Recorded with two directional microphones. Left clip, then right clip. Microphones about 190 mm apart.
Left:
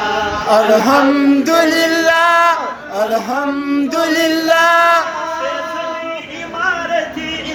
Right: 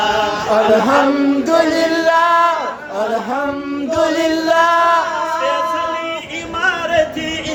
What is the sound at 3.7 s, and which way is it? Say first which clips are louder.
Chant: even; 10° left (ahead or behind).